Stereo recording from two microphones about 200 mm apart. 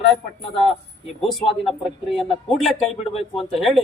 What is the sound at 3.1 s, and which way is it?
Speech, 30° left (ahead or behind).